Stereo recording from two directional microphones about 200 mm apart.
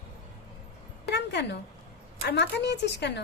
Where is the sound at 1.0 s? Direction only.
55° left (ahead or behind).